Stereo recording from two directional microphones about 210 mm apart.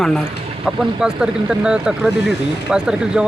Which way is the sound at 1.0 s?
5° right (ahead or behind).